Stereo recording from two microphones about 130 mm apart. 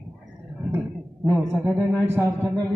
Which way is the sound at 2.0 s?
15° right (ahead or behind).